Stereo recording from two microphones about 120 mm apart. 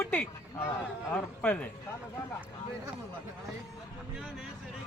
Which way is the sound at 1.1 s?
10° left (ahead or behind).